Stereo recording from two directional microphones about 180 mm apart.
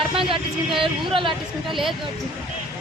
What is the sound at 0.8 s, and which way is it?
Speech, 30° right (ahead or behind).